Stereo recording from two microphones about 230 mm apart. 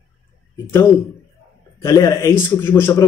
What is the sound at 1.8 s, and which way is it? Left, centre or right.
Speech, centre.